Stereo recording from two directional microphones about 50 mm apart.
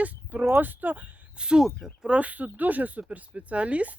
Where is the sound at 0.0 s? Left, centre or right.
Right.